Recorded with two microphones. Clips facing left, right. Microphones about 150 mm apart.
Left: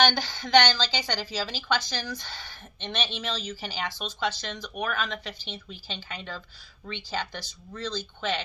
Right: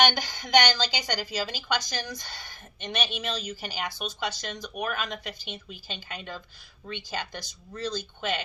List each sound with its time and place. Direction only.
0.0 s a woman's voice: 15° right (ahead or behind)